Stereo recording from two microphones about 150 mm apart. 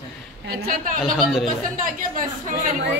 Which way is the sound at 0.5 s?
90° right.